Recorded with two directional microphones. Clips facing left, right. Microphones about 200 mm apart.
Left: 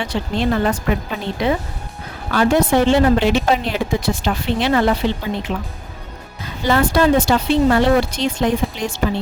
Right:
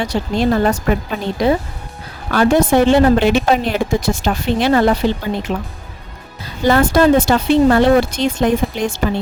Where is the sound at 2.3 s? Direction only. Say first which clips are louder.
Right 2 dB; 50° right (ahead or behind).